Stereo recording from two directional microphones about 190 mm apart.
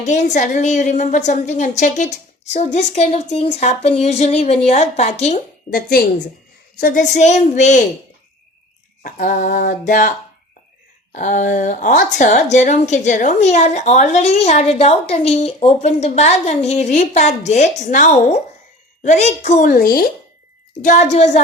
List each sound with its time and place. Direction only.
0.0 s a woman's voice: 40° left (ahead or behind)
5.7 s a sound: 55° left (ahead or behind)
6.7 s a woman's voice: 45° left (ahead or behind)
9.0 s a sound: 45° left (ahead or behind)
11.1 s a woman's voice: 40° left (ahead or behind)
20.8 s a woman's voice: 40° left (ahead or behind)